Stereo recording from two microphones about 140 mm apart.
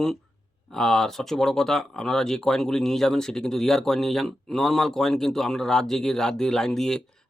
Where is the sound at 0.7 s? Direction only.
5° left (ahead or behind).